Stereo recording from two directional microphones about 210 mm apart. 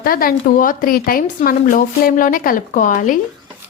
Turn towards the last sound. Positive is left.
turn(degrees=40)  # may be behind; listen again after turning